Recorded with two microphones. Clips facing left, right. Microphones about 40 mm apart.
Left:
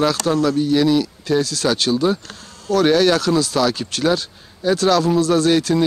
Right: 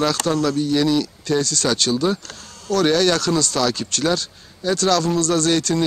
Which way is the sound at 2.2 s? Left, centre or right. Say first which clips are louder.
Left 2 dB; centre.